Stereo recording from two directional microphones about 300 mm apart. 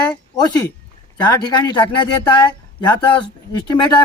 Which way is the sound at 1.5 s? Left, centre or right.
Centre.